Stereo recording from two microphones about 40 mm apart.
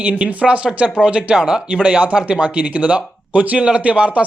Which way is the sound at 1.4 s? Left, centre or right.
Centre.